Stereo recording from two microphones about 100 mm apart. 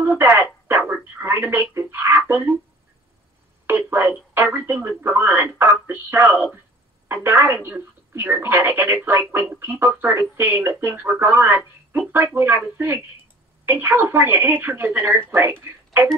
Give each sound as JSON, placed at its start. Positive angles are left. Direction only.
{"t": 0.0, "sound": "telephone", "side_deg": -20}
{"t": 3.6, "sound": "a woman's voice", "side_deg": -20}